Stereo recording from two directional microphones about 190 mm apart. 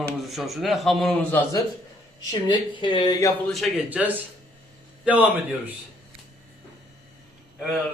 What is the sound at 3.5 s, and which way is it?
A man's voice, 5° right (ahead or behind).